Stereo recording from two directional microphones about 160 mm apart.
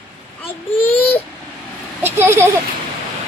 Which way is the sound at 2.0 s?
15° right (ahead or behind).